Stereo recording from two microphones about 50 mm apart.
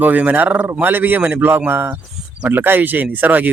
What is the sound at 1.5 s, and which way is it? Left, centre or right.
Speech, right.